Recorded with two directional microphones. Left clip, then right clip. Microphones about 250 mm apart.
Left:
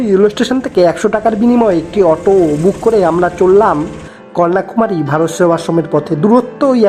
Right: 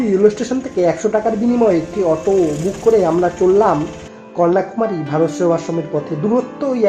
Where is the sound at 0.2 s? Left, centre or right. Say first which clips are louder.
Left 3 dB; left.